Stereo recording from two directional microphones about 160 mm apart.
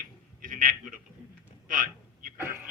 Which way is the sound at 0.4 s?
60° right (ahead or behind).